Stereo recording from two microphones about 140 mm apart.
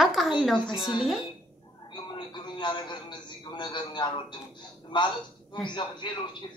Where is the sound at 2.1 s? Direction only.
35° left (ahead or behind).